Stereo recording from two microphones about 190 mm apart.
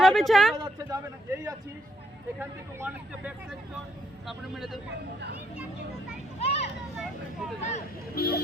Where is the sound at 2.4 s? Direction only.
10° right (ahead or behind).